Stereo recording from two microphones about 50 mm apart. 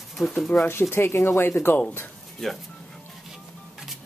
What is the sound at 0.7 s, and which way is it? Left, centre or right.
Speech, left.